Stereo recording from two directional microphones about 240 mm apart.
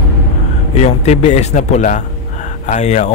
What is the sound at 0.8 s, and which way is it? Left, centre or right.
A man's voice, left.